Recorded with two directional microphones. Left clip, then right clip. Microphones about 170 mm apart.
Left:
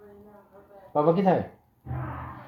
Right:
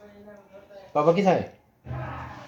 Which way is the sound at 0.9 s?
15° left (ahead or behind).